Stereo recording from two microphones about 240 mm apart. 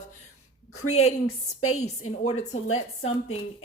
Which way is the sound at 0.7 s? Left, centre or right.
Left.